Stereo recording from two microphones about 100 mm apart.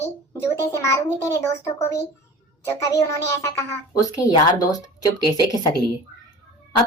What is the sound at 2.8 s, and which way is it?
A woman's voice, 30° left (ahead or behind).